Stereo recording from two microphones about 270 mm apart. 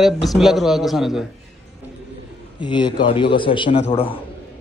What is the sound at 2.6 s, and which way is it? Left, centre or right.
A man's voice, centre.